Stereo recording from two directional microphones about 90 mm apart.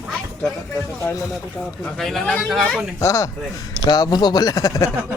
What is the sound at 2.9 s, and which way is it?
Speech, 35° left (ahead or behind).